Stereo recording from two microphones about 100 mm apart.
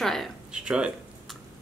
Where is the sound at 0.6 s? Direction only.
10° right (ahead or behind).